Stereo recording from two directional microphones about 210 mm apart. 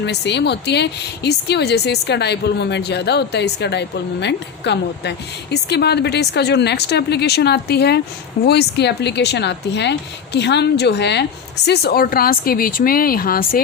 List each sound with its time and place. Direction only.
0.0 s a woman's voice: 55° left (ahead or behind)